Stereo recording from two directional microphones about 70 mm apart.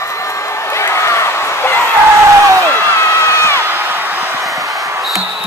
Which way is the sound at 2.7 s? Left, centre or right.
Left.